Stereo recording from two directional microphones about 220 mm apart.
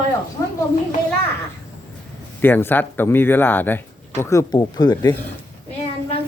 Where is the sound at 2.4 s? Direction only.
10° left (ahead or behind).